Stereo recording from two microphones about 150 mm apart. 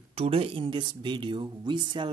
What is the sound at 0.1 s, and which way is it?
Speech, 40° right (ahead or behind).